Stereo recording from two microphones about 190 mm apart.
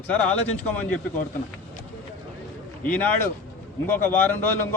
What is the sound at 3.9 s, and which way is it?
Speech, 10° left (ahead or behind).